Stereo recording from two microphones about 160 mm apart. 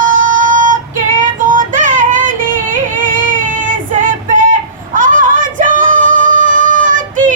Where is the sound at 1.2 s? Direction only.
55° right (ahead or behind).